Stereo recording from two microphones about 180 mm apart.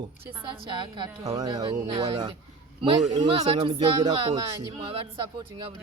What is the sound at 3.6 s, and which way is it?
Speech, 30° right (ahead or behind).